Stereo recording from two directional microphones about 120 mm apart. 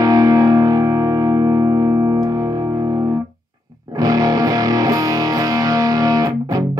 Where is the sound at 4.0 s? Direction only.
30° right (ahead or behind).